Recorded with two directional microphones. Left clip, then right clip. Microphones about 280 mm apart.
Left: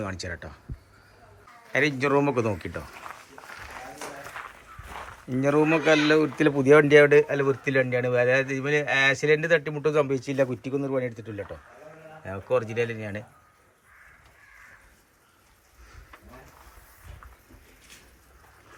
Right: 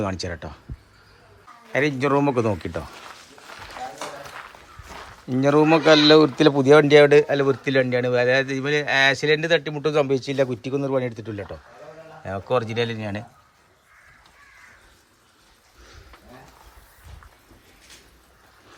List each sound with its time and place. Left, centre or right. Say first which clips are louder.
0.0 s speech: right 6 dB; centre
1.7 s speech: right 2 dB; centre
5.3 s speech: right 5 dB; centre